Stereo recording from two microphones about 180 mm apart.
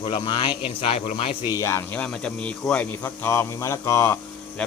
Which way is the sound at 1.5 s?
15° left (ahead or behind).